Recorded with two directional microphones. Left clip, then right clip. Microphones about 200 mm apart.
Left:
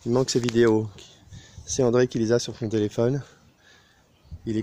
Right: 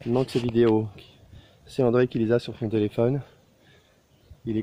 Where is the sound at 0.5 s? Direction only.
Centre (ahead or behind).